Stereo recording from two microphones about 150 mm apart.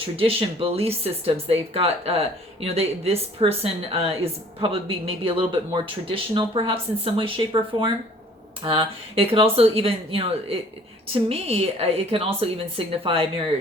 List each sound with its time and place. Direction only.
0.2 s speech: 40° right (ahead or behind)